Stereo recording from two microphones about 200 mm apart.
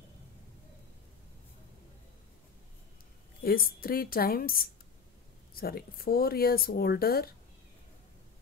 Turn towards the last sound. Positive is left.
turn(degrees=50)  # may be behind; listen again after turning